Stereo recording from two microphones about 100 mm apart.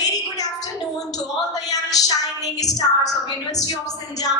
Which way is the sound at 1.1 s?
40° left (ahead or behind).